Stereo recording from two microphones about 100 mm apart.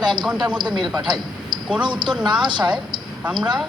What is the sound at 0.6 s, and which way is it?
A woman's voice, 50° right (ahead or behind).